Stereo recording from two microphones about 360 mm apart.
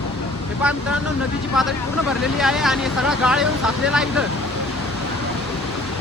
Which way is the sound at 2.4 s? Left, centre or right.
Centre.